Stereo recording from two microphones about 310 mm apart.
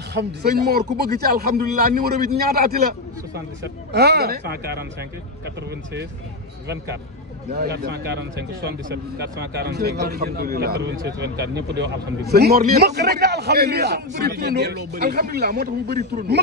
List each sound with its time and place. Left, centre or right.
0.1 s a man's voice: right
7.5 s a man's voice: right